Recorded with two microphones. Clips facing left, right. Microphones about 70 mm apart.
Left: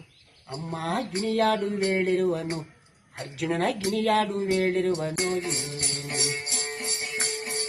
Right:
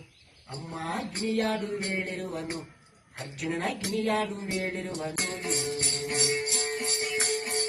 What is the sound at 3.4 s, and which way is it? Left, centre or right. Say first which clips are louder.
Speech: left 5 dB; left.